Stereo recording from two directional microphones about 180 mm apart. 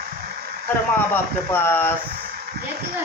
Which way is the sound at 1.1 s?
10° left (ahead or behind).